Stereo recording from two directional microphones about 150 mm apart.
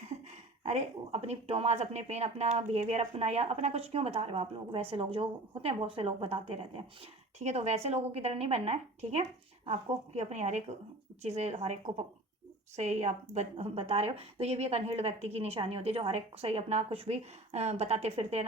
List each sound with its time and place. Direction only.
0.6 s speech: 45° right (ahead or behind)